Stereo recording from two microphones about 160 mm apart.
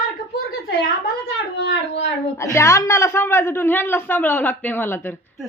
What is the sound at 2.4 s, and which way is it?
A man's voice, 15° left (ahead or behind).